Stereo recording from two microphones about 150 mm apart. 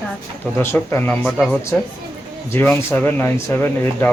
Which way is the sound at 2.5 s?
10° left (ahead or behind).